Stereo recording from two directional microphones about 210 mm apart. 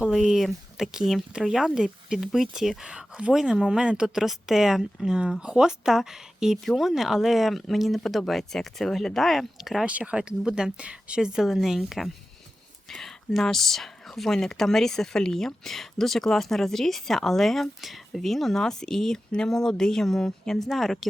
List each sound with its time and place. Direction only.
0.0 s speech: centre (ahead or behind)